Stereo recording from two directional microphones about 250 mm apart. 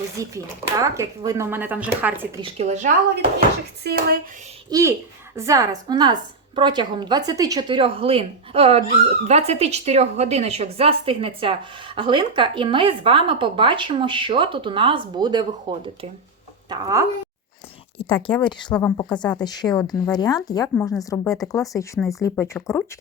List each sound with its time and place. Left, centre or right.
0.2 s speech: centre
2.4 s speech: right
4.7 s speech: centre
17.9 s speech: left